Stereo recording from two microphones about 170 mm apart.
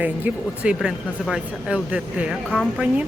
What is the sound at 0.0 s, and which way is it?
Speech, 10° right (ahead or behind).